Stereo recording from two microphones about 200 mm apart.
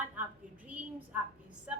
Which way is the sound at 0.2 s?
10° right (ahead or behind).